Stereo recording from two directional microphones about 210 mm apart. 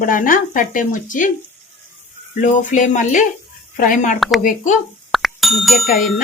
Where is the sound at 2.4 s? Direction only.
35° left (ahead or behind).